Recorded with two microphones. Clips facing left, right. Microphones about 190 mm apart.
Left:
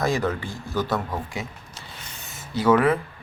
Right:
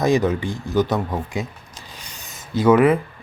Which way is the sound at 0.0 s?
20° right (ahead or behind).